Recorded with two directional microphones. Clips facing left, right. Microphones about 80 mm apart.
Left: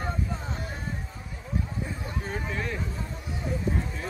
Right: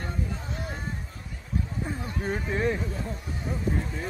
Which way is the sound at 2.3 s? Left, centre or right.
Right.